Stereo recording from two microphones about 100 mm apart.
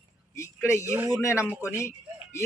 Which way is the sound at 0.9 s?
25° right (ahead or behind).